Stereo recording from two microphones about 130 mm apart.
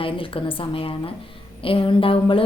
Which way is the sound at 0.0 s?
45° left (ahead or behind).